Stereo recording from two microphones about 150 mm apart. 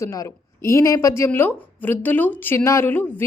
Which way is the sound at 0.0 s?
20° left (ahead or behind).